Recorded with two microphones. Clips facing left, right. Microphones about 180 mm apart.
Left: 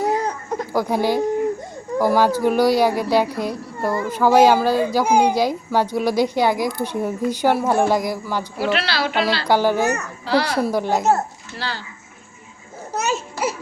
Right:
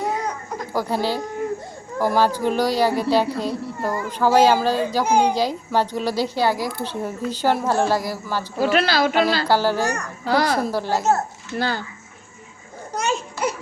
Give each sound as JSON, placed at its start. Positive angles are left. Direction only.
{"t": 0.7, "sound": "a woman's voice", "side_deg": 15}
{"t": 8.7, "sound": "a woman's voice", "side_deg": -45}
{"t": 9.5, "sound": "a woman's voice", "side_deg": 15}
{"t": 10.2, "sound": "a woman's voice", "side_deg": -45}
{"t": 10.7, "sound": "a woman's voice", "side_deg": 15}
{"t": 11.5, "sound": "a woman's voice", "side_deg": -50}
{"t": 12.9, "sound": "baby cry", "side_deg": 5}